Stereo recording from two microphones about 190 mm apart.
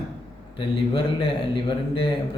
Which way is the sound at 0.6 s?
30° left (ahead or behind).